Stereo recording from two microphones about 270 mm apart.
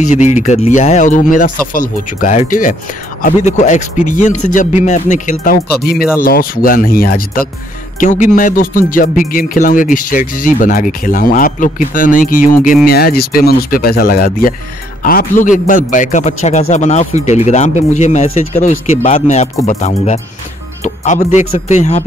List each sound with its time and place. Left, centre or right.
0.1 s speech: left